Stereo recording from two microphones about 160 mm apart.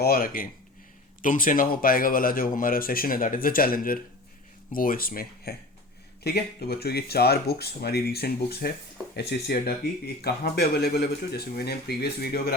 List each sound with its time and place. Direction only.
0.0 s speech: 65° left (ahead or behind)
1.2 s speech: 55° left (ahead or behind)
6.2 s speech: 85° left
9.1 s speech: 90° left